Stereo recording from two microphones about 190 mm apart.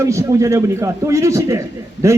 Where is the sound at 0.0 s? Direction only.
15° right (ahead or behind).